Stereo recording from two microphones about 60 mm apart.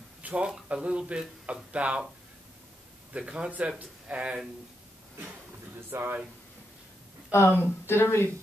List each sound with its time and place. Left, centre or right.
0.2 s a sound: centre
0.7 s speech: centre
3.1 s speech: centre
5.9 s speech: right
7.2 s speech: left